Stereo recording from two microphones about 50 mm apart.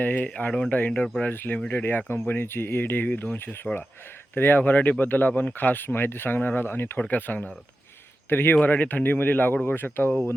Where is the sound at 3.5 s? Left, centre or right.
Left.